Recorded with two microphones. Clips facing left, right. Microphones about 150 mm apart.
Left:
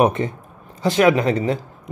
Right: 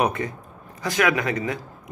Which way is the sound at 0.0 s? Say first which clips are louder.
Left 6 dB; 25° left (ahead or behind).